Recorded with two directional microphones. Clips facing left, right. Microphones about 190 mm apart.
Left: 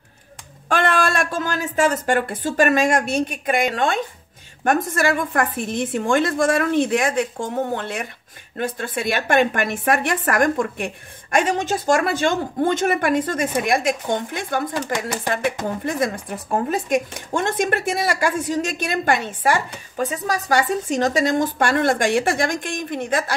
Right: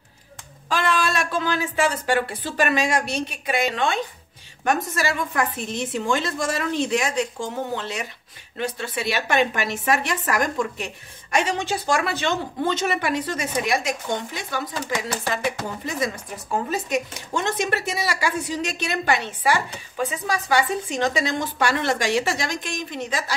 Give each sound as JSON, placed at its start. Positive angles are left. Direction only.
{"t": 0.7, "sound": "a woman's voice", "side_deg": 55}